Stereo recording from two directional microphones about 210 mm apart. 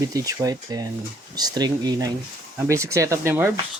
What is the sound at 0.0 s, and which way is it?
Speech, 15° right (ahead or behind).